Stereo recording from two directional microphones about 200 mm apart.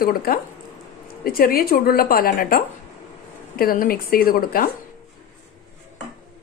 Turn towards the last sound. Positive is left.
turn(degrees=50)  # may be behind; listen again after turning